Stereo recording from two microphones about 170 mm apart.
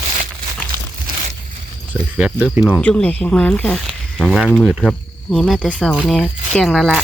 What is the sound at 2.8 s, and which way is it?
Speech, 5° left (ahead or behind).